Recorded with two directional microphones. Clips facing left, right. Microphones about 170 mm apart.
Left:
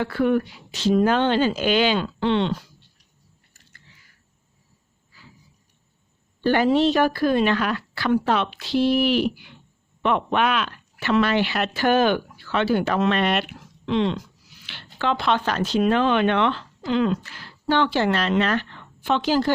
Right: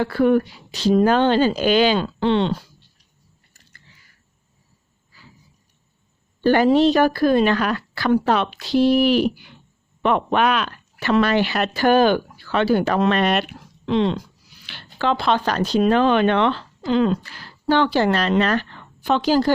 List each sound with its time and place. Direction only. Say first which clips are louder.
0.0 s a woman's voice: right 4 dB; 35° right (ahead or behind)
5.1 s a sound: right 1 dB; 40° right (ahead or behind)
6.4 s a woman's voice: right 3 dB; 40° right (ahead or behind)